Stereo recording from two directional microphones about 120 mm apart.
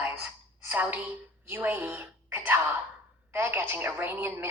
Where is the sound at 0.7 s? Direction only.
15° right (ahead or behind).